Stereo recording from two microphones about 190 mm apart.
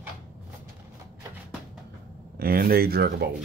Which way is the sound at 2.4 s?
50° right (ahead or behind).